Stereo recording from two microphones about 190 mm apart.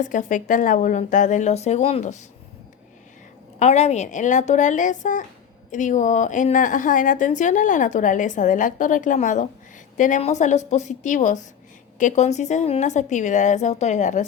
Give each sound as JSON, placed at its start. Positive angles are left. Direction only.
{"t": 0.0, "sound": "a woman's voice", "side_deg": 40}
{"t": 3.6, "sound": "a woman's voice", "side_deg": 35}